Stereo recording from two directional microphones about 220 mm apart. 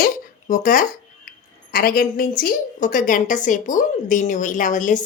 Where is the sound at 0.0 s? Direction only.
35° left (ahead or behind).